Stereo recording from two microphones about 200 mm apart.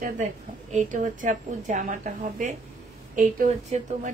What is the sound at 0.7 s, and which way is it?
A woman's voice, 40° right (ahead or behind).